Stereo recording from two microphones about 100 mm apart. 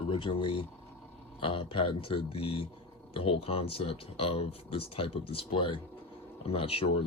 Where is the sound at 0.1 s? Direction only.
60° left (ahead or behind).